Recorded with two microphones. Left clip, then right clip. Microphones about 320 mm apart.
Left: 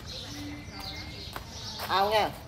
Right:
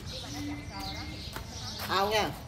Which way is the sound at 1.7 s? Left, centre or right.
Left.